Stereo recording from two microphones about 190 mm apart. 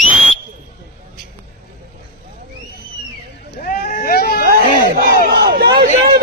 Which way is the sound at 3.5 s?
50° left (ahead or behind).